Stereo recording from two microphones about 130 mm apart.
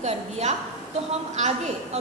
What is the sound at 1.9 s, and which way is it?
Speech, 60° right (ahead or behind).